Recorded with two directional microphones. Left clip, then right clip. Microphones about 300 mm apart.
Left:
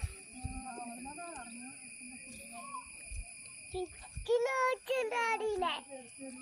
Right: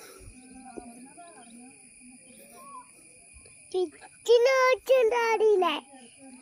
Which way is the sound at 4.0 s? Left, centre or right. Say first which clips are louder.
Right 11 dB; right.